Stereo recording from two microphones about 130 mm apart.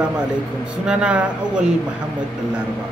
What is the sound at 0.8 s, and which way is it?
Speech, 10° right (ahead or behind).